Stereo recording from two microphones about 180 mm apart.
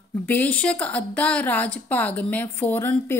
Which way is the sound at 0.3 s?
10° left (ahead or behind).